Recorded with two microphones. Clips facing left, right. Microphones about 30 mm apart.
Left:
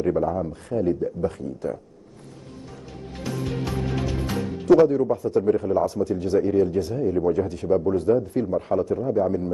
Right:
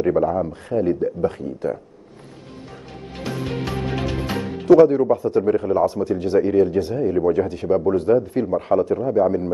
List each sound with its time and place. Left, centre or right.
0.0 s a man's voice: right
3.2 s music: right
4.7 s a man's voice: right